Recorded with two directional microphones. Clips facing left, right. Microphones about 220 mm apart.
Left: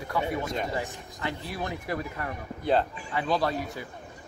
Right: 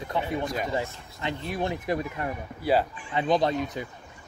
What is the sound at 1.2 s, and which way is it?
Speech, 20° right (ahead or behind).